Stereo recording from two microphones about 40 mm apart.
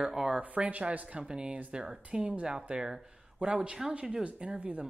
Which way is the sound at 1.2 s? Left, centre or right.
Right.